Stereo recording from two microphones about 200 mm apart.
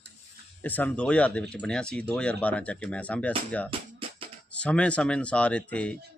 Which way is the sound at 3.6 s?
25° right (ahead or behind).